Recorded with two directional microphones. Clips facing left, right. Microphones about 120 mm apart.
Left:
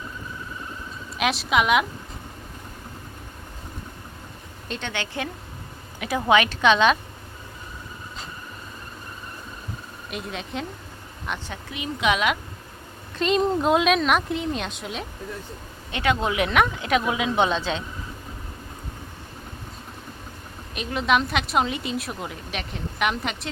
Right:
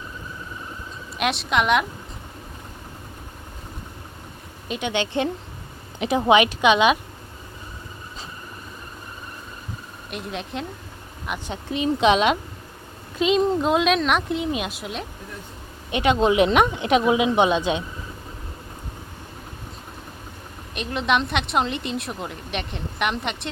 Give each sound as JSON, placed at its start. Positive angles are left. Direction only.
{"t": 1.2, "sound": "a woman's voice", "side_deg": 0}
{"t": 4.7, "sound": "speech", "side_deg": -15}
{"t": 10.1, "sound": "a woman's voice", "side_deg": 0}
{"t": 11.5, "sound": "speech", "side_deg": -30}
{"t": 13.1, "sound": "a woman's voice", "side_deg": 0}
{"t": 15.9, "sound": "speech", "side_deg": -20}
{"t": 20.7, "sound": "a woman's voice", "side_deg": 0}